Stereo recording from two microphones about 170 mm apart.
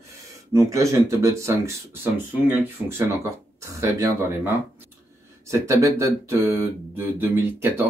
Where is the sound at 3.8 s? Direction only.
15° right (ahead or behind).